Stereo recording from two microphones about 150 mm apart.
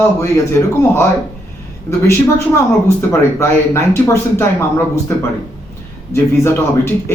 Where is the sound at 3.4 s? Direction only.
15° left (ahead or behind).